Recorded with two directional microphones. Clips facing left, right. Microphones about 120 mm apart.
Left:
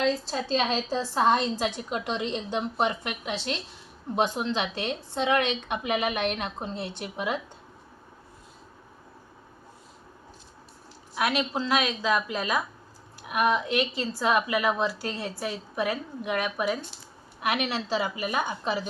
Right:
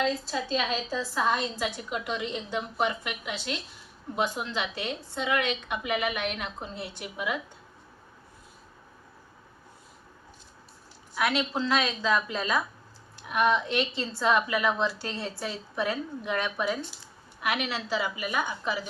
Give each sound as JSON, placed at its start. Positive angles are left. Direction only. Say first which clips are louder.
{"t": 0.1, "sound": "a woman's voice", "louder": "left 2 dB", "side_deg": 35}
{"t": 11.1, "sound": "speech", "louder": "left 1 dB", "side_deg": 20}
{"t": 13.9, "sound": "a woman's voice", "louder": "left 2 dB", "side_deg": -25}
{"t": 14.2, "sound": "a woman's voice", "louder": "even", "side_deg": 15}